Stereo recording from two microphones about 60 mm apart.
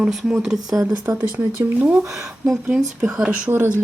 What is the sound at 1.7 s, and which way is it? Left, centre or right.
Speech, right.